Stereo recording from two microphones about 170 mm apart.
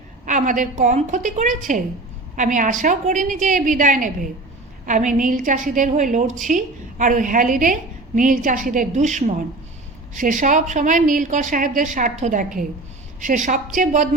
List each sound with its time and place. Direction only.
0.3 s a woman's voice: 50° right (ahead or behind)